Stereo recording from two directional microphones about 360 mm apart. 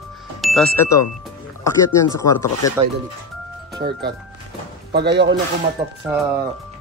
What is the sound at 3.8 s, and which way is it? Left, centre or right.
A man's voice, right.